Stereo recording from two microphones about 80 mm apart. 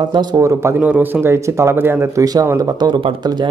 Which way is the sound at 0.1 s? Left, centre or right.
Right.